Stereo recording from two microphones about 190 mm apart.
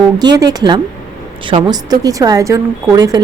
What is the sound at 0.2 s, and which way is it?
A woman's voice, 20° right (ahead or behind).